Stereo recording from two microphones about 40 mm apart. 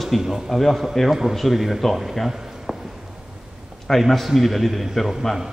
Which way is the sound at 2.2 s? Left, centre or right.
Centre.